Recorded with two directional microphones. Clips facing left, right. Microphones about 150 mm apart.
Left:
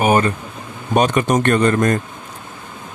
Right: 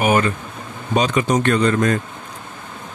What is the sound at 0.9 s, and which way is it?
Speech, 50° left (ahead or behind).